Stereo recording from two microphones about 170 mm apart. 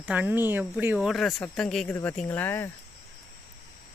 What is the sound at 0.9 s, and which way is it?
Speech, centre (ahead or behind).